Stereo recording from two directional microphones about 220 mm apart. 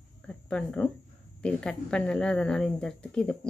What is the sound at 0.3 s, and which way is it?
Speech, 5° left (ahead or behind).